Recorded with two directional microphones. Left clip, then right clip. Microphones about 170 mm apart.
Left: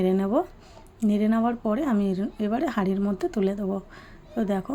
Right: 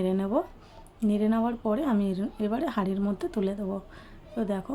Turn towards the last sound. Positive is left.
turn(degrees=15)  # may be behind; listen again after turning